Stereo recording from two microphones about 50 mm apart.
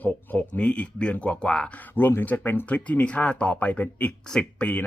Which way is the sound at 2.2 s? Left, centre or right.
Left.